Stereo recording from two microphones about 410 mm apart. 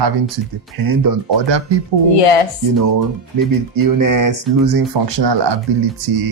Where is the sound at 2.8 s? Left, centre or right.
Right.